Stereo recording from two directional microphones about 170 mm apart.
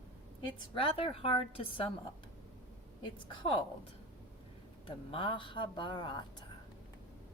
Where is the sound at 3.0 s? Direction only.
30° left (ahead or behind).